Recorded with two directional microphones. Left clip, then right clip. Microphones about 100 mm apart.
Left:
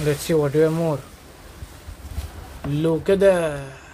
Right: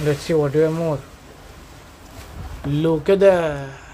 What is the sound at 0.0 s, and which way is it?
Speech, centre (ahead or behind).